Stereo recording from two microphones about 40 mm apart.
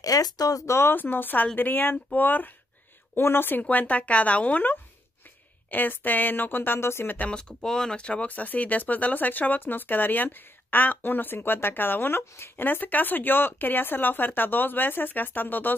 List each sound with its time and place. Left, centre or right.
0.9 s speech: left
3.2 s speech: left
3.7 s a woman's voice: left
5.7 s speech: left
7.2 s speech: left
8.0 s speech: left
8.3 s speech: left
12.6 s speech: left